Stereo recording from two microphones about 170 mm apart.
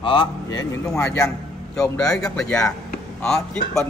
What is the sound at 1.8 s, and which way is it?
Speech, 5° left (ahead or behind).